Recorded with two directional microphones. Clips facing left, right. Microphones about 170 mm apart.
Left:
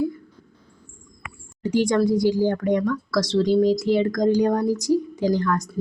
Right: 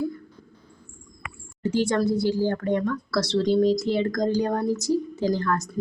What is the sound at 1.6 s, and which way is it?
Speech, 10° left (ahead or behind).